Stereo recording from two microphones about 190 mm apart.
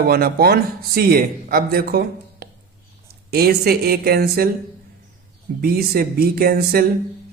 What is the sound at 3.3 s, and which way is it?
Speech, 55° right (ahead or behind).